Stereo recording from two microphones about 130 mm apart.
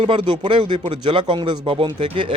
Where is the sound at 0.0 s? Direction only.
40° right (ahead or behind).